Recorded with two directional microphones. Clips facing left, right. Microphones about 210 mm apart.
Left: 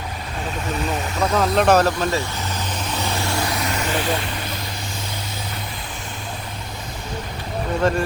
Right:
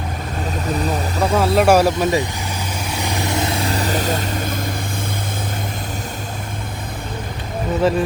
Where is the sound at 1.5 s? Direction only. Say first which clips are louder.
Right 3 dB; 10° right (ahead or behind).